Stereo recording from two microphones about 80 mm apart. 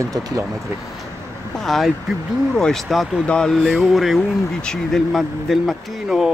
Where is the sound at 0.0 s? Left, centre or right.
Right.